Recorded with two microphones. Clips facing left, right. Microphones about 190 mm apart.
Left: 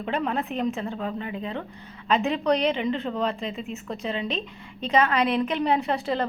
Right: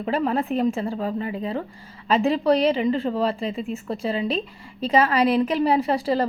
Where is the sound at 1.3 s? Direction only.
40° right (ahead or behind).